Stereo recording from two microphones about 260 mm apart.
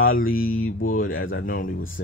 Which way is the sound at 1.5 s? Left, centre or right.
Left.